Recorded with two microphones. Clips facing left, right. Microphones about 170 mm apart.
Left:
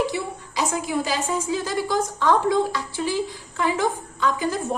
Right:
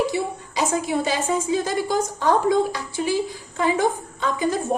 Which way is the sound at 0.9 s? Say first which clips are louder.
Right 2 dB; 25° right (ahead or behind).